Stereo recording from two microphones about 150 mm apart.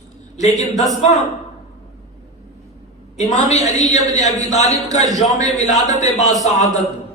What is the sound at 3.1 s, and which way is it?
A man's voice, 50° left (ahead or behind).